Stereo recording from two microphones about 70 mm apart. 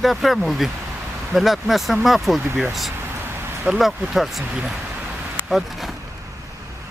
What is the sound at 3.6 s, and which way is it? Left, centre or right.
Speech, centre.